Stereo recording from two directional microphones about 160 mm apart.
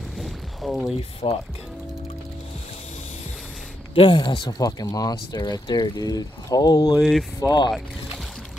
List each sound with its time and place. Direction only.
0.2 s a sound: centre (ahead or behind)
1.2 s speech: 40° left (ahead or behind)
3.9 s speech: 30° left (ahead or behind)
7.0 s speech: centre (ahead or behind)
7.3 s speech: 25° left (ahead or behind)